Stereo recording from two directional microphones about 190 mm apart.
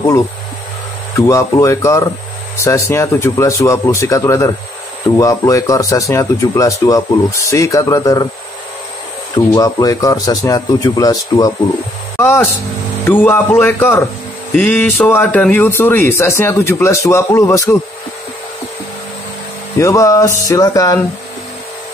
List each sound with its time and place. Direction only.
1.1 s a man's voice: 15° left (ahead or behind)
9.5 s a man's voice: 20° left (ahead or behind)
13.0 s a man's voice: 10° left (ahead or behind)
19.8 s a man's voice: 15° left (ahead or behind)